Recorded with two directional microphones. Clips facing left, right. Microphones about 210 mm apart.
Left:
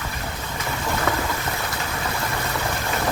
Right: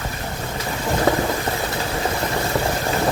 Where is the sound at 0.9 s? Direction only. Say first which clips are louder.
Right 7 dB; 35° right (ahead or behind).